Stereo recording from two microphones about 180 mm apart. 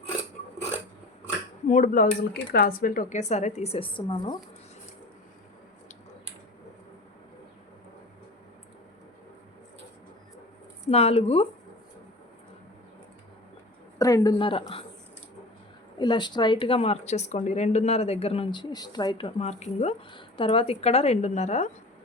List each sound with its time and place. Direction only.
1.6 s a woman's voice: 45° left (ahead or behind); by 4.4 s 25° left (ahead or behind)
10.9 s a woman's voice: 35° left (ahead or behind)
14.0 s a woman's voice: 20° left (ahead or behind)
16.0 s a woman's voice: 25° left (ahead or behind); by 21.7 s 40° left (ahead or behind)